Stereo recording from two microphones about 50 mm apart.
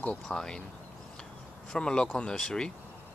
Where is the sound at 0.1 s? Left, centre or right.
Centre.